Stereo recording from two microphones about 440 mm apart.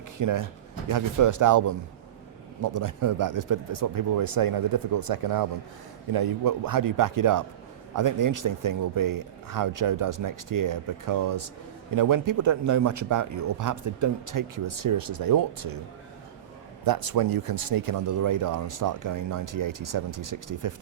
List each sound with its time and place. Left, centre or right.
0.2 s speech: right
16.8 s speech: right